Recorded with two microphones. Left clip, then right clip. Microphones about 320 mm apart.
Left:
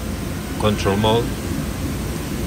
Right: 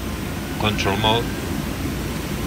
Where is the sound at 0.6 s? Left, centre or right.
Centre.